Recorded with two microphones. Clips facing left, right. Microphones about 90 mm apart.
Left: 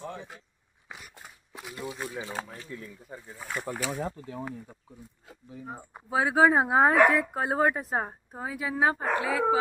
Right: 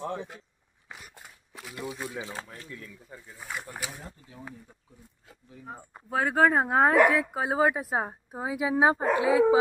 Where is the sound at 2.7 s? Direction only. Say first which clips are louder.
Left 3 dB; 20° left (ahead or behind).